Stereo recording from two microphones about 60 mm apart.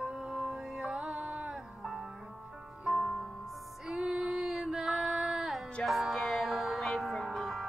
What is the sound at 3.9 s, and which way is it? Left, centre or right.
Female singing, centre.